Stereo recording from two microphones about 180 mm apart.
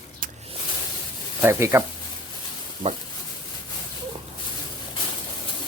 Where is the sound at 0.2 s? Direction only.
40° right (ahead or behind).